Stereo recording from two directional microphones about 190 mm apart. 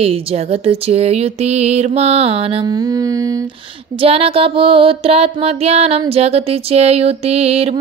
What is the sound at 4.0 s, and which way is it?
Speech, 30° right (ahead or behind).